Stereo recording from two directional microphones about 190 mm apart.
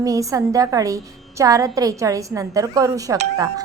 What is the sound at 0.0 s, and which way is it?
A woman's voice, 15° right (ahead or behind).